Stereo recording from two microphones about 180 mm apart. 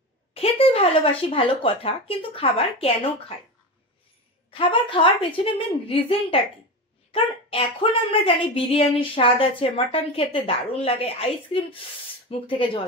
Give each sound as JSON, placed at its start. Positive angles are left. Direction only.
{"t": 0.3, "sound": "a sound", "side_deg": 30}
{"t": 1.3, "sound": "a woman's voice", "side_deg": 30}
{"t": 4.5, "sound": "a woman's voice", "side_deg": 30}